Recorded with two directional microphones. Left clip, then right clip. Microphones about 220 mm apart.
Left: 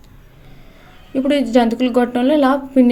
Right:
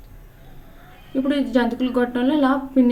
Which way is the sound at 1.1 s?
35° left (ahead or behind).